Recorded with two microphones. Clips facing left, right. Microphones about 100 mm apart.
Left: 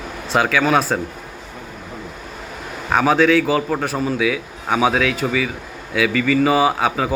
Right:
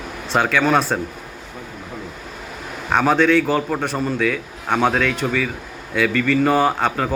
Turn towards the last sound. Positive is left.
turn(degrees=5)  # may be behind; listen again after turning